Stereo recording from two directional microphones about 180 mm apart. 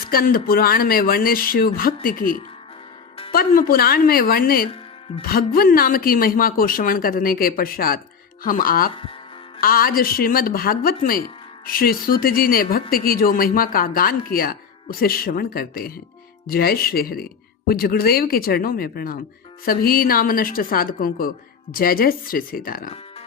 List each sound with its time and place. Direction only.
0.1 s speech: 55° left (ahead or behind)
3.7 s speech: 55° left (ahead or behind)
4.7 s music: 30° left (ahead or behind)
5.2 s speech: 55° left (ahead or behind)